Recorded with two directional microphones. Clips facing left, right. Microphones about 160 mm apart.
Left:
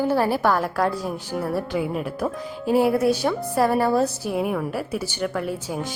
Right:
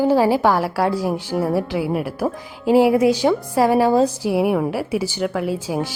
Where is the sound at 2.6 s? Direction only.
90° right.